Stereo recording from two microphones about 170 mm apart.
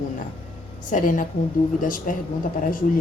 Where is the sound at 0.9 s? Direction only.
50° left (ahead or behind).